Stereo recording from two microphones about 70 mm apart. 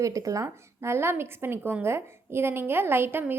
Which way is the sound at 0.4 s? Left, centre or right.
Right.